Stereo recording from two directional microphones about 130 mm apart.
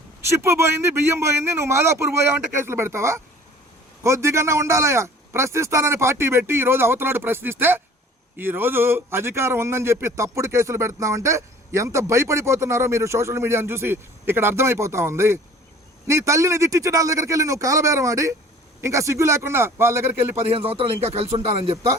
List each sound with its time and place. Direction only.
0.3 s a man's voice: 20° right (ahead or behind)
20.7 s a man's voice: 50° right (ahead or behind)